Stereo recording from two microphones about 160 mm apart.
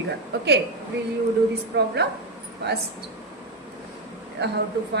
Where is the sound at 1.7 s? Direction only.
90° right.